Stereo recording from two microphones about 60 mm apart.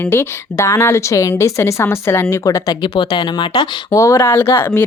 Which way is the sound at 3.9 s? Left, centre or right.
Left.